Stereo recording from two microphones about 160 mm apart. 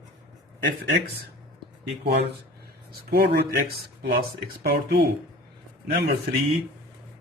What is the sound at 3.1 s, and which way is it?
Speech, 90° right.